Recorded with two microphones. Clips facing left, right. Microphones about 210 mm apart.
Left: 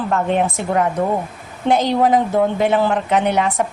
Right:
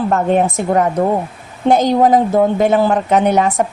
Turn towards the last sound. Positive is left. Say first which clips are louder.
# right 4 dB
turn(degrees=-45)  # may be behind; listen again after turning